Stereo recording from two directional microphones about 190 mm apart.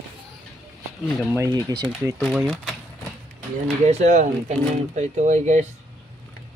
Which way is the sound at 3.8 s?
35° right (ahead or behind).